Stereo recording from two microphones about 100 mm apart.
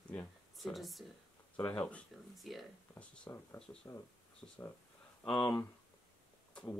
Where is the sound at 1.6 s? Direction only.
15° left (ahead or behind).